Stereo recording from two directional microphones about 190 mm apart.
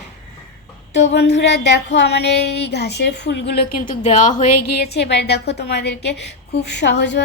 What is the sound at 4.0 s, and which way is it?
A woman's voice, 40° left (ahead or behind).